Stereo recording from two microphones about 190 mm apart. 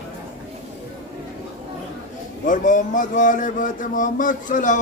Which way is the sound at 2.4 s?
40° left (ahead or behind).